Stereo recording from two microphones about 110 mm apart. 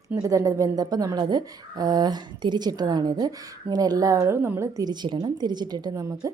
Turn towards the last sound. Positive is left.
turn(degrees=-30)  # may be behind; listen again after turning